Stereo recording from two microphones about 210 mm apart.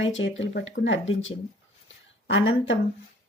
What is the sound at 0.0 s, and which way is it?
Speech, 65° left (ahead or behind).